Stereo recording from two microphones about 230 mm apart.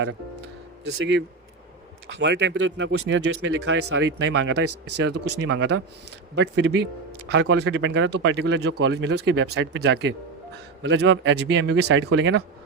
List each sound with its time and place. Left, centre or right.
2.0 s speech: right